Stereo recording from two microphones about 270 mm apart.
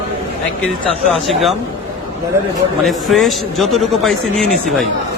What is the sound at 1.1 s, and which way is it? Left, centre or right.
Speech, centre.